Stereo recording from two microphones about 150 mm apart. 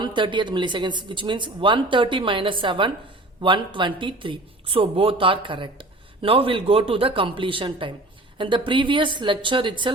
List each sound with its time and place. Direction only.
0.0 s speech: 30° right (ahead or behind)